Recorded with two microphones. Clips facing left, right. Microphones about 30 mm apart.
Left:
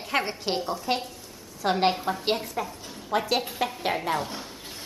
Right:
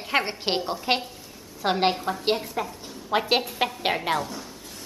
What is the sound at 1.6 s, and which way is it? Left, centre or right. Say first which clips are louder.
Speech: even; centre.